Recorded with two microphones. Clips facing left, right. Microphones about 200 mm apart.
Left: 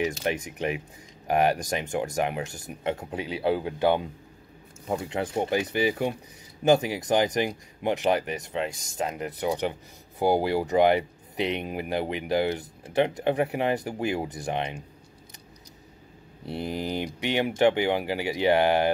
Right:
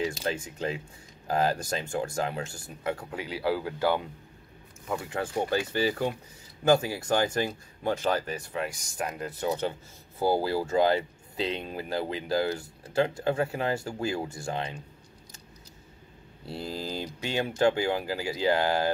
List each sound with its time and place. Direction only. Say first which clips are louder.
0.0 s speech: left 3 dB; 20° left (ahead or behind)
16.4 s speech: left 4 dB; 20° left (ahead or behind)